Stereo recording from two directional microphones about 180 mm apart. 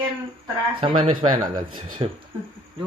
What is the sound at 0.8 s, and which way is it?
A woman's voice, 30° right (ahead or behind).